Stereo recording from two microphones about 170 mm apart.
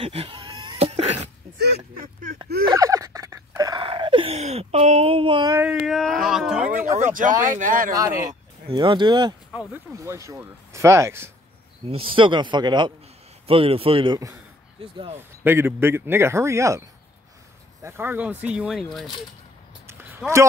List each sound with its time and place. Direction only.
0.0 s a sound: 35° right (ahead or behind)
1.6 s speech: 75° right (ahead or behind)
2.7 s a sound: 20° right (ahead or behind)
3.8 s a sound: 30° right (ahead or behind)
5.6 s speech: 5° right (ahead or behind)
7.0 s speech: 50° right (ahead or behind)
7.9 s speech: 20° right (ahead or behind)
11.8 s a man's voice: 30° right (ahead or behind)
14.8 s a man's voice: 35° right (ahead or behind)
15.1 s speech: 15° right (ahead or behind)
17.8 s speech: 15° right (ahead or behind)
19.9 s a sound: 15° right (ahead or behind)